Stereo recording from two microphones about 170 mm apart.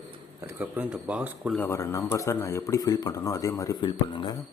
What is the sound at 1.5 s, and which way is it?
Speech, 15° left (ahead or behind).